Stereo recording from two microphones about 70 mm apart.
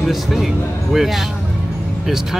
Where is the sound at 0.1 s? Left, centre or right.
Centre.